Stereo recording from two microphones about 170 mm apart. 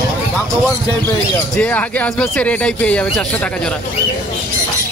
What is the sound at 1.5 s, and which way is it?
Speech, 5° left (ahead or behind).